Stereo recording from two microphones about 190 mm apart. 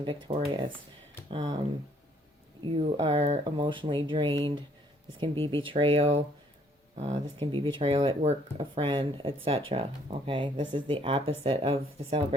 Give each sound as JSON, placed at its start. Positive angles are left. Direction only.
{"t": 0.3, "sound": "speech", "side_deg": -35}
{"t": 1.3, "sound": "speech", "side_deg": -25}
{"t": 2.6, "sound": "speech", "side_deg": -30}
{"t": 7.3, "sound": "speech", "side_deg": -30}